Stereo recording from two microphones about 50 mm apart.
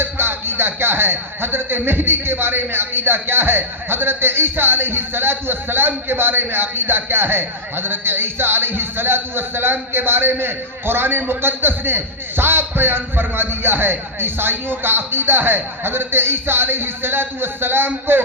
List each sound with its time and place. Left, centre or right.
0.0 s a man's voice: right